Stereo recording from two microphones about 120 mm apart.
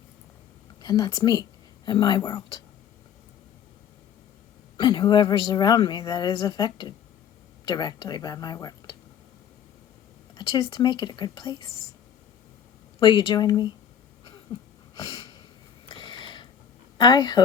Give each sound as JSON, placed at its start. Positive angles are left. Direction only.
{"t": 0.8, "sound": "speech", "side_deg": 35}
{"t": 4.8, "sound": "a woman's voice", "side_deg": 40}
{"t": 10.3, "sound": "speech", "side_deg": 40}
{"t": 13.0, "sound": "speech", "side_deg": 45}
{"t": 14.9, "sound": "a sound", "side_deg": 35}
{"t": 15.9, "sound": "mechanisms", "side_deg": 40}
{"t": 17.0, "sound": "speech", "side_deg": 40}